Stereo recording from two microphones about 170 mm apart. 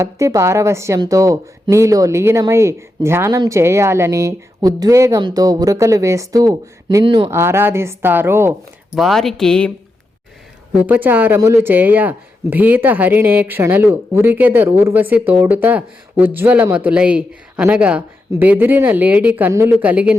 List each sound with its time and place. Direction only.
0.0 s speech: 20° right (ahead or behind)
7.3 s speech: 15° right (ahead or behind)
9.0 s speech: centre (ahead or behind)
10.7 s speech: 10° right (ahead or behind)